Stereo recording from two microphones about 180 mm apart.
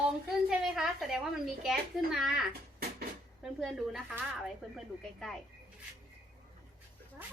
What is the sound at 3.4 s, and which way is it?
Speech, centre (ahead or behind).